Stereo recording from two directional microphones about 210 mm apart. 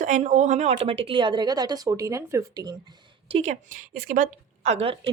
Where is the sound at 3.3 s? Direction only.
30° right (ahead or behind).